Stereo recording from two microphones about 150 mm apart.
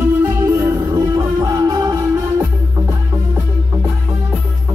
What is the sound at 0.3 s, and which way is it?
Music, 20° right (ahead or behind).